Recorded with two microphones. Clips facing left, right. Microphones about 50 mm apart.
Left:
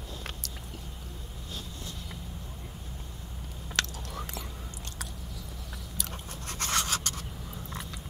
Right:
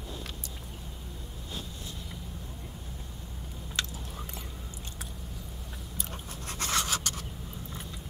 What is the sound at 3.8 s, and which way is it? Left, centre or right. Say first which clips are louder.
Whispering: left 3 dB; left.